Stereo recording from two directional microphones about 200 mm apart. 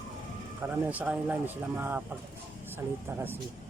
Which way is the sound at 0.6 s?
10° right (ahead or behind).